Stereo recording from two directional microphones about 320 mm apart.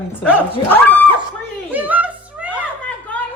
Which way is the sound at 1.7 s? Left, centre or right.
Centre.